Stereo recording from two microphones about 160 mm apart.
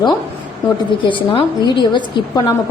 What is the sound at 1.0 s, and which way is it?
A woman's voice, 30° left (ahead or behind).